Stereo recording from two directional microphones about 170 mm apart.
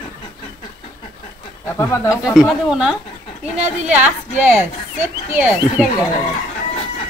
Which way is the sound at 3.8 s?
10° right (ahead or behind).